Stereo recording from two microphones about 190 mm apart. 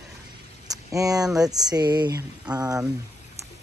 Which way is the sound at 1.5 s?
20° right (ahead or behind).